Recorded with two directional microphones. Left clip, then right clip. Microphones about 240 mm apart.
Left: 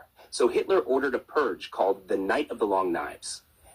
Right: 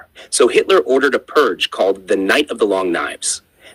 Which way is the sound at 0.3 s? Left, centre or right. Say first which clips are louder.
Right 11 dB; right.